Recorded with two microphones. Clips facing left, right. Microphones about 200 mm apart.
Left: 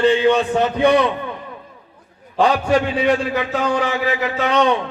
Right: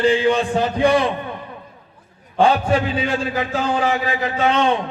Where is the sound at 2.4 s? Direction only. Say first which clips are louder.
Even; 30° right (ahead or behind).